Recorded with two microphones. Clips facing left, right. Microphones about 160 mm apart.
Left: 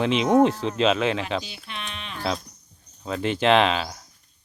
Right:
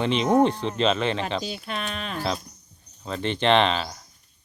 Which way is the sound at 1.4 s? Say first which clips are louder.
Right 6 dB; 40° right (ahead or behind).